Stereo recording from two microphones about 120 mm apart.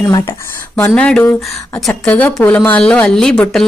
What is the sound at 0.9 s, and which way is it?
Speech, 5° left (ahead or behind).